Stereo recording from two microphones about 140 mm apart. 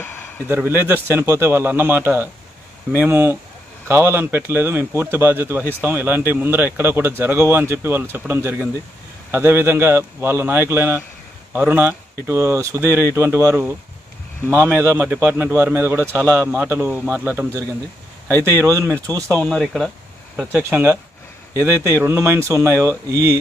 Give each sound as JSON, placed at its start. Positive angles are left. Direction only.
{"t": 0.0, "sound": "a sound", "side_deg": 15}
{"t": 0.5, "sound": "speech", "side_deg": -15}
{"t": 14.8, "sound": "speech", "side_deg": -15}
{"t": 19.3, "sound": "speech", "side_deg": 5}
{"t": 22.0, "sound": "speech", "side_deg": -20}